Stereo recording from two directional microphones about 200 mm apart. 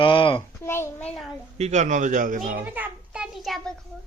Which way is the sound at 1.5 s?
35° right (ahead or behind).